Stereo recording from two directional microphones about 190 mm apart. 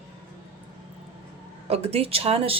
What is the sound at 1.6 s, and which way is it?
Speech, 30° right (ahead or behind).